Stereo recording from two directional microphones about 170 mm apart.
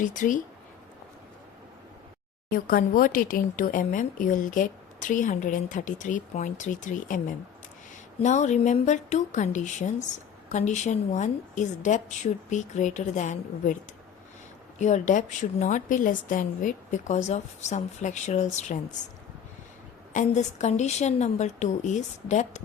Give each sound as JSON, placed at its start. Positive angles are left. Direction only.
{"t": 0.0, "sound": "speech", "side_deg": 50}
{"t": 2.5, "sound": "speech", "side_deg": 55}
{"t": 8.2, "sound": "speech", "side_deg": 45}
{"t": 14.8, "sound": "speech", "side_deg": 45}
{"t": 20.1, "sound": "speech", "side_deg": 45}